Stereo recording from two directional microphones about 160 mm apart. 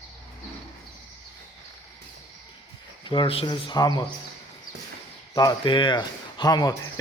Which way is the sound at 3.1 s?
35° left (ahead or behind).